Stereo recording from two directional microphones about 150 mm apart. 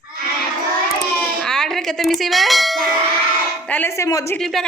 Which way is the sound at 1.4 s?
5° left (ahead or behind).